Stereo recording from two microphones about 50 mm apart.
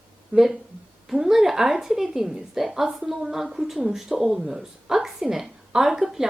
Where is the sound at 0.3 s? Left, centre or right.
Right.